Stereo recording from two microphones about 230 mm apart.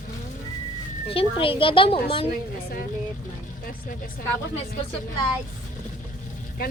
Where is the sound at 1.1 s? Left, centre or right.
Left.